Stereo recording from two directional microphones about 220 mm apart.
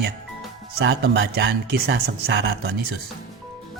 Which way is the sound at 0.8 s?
50° right (ahead or behind).